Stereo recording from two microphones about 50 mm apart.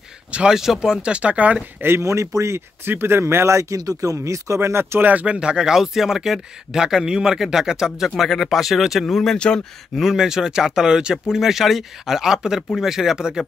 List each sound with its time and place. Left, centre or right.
0.5 s speech: centre; by 1.6 s right
1.8 s speech: right
2.0 s speech: right
2.8 s speech: right
5.2 s speech: centre
8.2 s speech: centre
9.0 s speech: centre
9.9 s speech: centre